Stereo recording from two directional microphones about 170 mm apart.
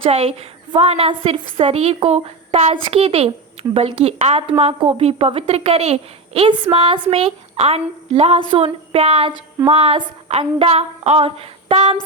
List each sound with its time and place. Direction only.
0.0 s a woman's voice: 35° right (ahead or behind)